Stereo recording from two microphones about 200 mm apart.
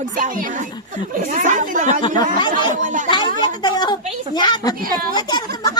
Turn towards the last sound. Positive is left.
turn(degrees=20)  # may be behind; listen again after turning